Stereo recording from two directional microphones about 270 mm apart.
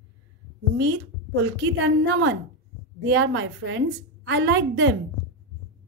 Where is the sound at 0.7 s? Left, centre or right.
Right.